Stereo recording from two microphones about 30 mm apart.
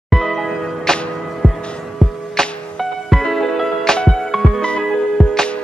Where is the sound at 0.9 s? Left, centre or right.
Left.